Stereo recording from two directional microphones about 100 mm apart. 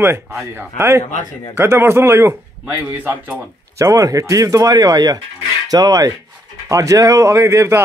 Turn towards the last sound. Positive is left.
turn(degrees=-30)  # may be behind; listen again after turning